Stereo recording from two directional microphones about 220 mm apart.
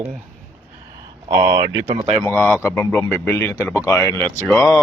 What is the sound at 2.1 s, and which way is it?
Speech, 10° left (ahead or behind).